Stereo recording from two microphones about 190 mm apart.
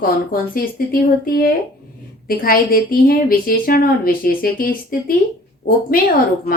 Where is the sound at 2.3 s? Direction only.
50° left (ahead or behind).